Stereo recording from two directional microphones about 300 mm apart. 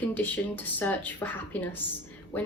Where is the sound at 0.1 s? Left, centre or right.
Centre.